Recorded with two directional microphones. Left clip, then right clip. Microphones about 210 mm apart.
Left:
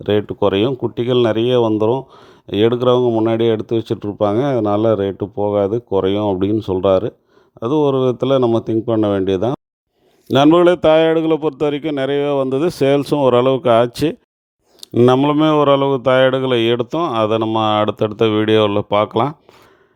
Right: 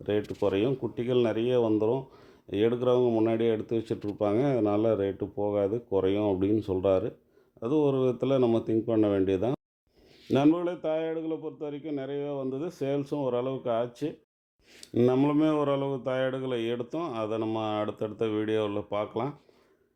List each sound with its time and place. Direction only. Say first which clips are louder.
0.0 s a man's voice: left 12 dB; 40° left (ahead or behind)